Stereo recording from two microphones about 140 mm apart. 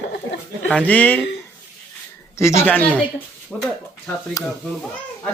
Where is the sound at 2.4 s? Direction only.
20° left (ahead or behind).